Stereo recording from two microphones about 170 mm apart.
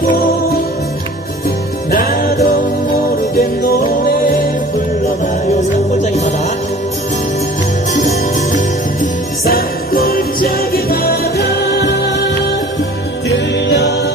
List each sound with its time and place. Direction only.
1.9 s music: 60° left (ahead or behind)
7.9 s music: 45° left (ahead or behind); by 12.0 s 80° left